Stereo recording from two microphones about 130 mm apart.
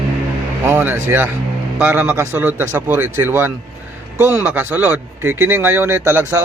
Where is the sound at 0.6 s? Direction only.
15° right (ahead or behind).